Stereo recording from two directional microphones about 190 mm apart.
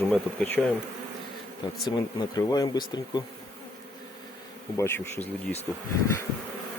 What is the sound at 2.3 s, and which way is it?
Speech, 20° left (ahead or behind).